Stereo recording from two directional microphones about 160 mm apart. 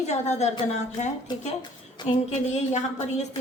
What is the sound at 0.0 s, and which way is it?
A woman's voice, 45° left (ahead or behind).